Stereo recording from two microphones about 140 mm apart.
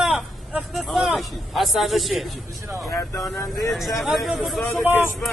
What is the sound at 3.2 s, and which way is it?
Speech, 20° left (ahead or behind).